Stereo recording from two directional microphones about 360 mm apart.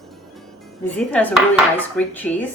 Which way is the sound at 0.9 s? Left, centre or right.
Centre.